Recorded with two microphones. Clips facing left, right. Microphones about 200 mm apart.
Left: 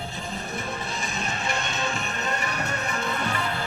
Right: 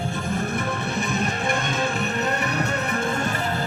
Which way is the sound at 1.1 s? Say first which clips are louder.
Right 5 dB; 55° right (ahead or behind).